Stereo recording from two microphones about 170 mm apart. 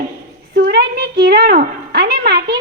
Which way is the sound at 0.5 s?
70° right (ahead or behind).